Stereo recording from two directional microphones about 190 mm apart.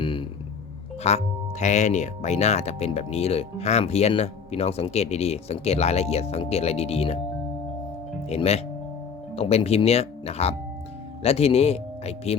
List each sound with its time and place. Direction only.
0.0 s a sound: 25° left (ahead or behind)
1.0 s speech: 35° left (ahead or behind)
8.3 s speech: 35° left (ahead or behind)